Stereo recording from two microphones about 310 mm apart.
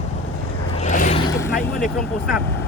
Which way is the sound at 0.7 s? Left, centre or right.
Left.